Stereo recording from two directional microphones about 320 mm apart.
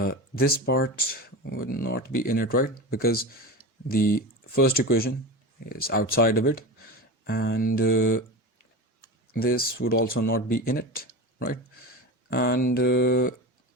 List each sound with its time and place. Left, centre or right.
0.0 s speech: left
9.3 s speech: left